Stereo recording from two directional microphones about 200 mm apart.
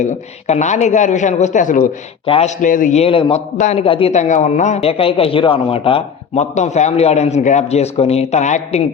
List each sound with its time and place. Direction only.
0.0 s a man's voice: 35° left (ahead or behind)
2.2 s a man's voice: 25° left (ahead or behind)
2.6 s a man's voice: 40° left (ahead or behind)